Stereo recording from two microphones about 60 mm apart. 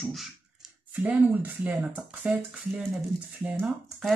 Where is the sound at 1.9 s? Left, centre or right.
Centre.